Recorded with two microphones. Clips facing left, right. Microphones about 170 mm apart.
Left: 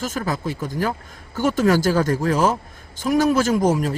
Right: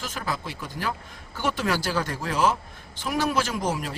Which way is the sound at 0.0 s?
45° left (ahead or behind).